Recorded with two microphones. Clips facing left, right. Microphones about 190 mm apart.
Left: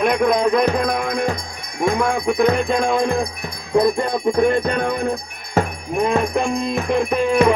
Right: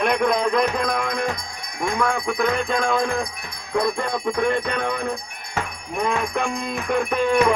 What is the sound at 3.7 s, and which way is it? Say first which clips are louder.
Music: left 6 dB; 30° left (ahead or behind).